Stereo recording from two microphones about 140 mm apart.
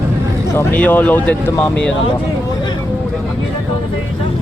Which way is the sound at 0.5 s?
15° left (ahead or behind).